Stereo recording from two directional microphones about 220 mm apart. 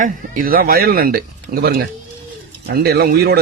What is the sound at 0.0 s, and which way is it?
A man's voice, 40° right (ahead or behind).